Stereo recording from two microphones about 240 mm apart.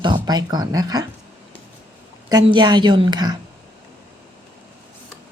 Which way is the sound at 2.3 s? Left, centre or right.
Centre.